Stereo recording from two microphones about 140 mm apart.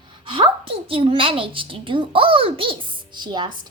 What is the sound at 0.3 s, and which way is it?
A woman's voice, 40° right (ahead or behind).